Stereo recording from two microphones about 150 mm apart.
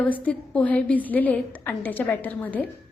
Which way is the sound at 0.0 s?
10° left (ahead or behind).